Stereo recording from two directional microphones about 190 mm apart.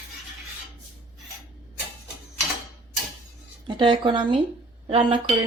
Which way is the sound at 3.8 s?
25° right (ahead or behind).